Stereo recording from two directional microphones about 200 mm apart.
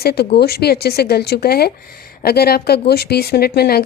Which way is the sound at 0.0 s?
50° left (ahead or behind).